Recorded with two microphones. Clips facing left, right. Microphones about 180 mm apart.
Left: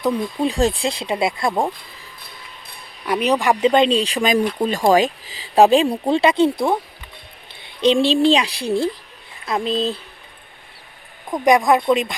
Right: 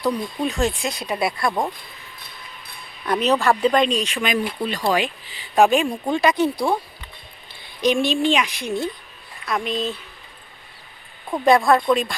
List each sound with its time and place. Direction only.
0.0 s speech: 30° left (ahead or behind)
3.1 s speech: 15° left (ahead or behind)
7.8 s speech: 30° left (ahead or behind)
11.3 s speech: 15° left (ahead or behind)